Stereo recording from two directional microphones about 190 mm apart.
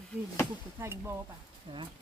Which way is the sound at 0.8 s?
15° right (ahead or behind).